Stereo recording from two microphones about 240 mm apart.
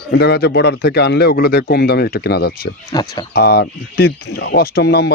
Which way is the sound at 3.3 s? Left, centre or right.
Left.